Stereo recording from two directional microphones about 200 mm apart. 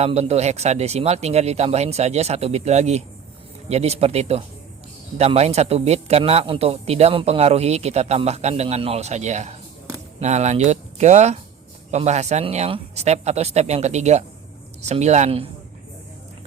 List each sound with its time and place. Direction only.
0.0 s speech: 35° right (ahead or behind)